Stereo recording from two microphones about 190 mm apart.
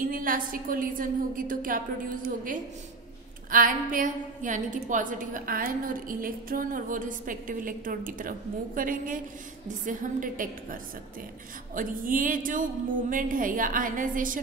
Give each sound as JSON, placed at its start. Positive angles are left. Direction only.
{"t": 0.0, "sound": "a woman's voice", "side_deg": -45}